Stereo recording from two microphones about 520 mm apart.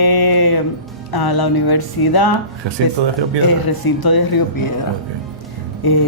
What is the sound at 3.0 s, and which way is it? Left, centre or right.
Speech, right.